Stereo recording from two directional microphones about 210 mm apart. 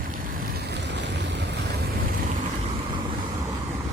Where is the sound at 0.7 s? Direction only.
55° right (ahead or behind).